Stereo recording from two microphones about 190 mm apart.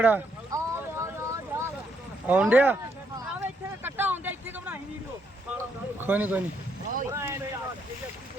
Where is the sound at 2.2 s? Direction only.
10° right (ahead or behind).